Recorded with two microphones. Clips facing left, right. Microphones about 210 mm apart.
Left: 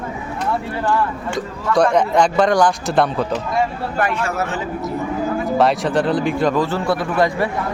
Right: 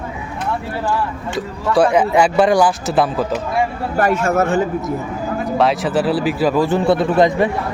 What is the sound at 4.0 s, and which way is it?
Speech, 40° right (ahead or behind).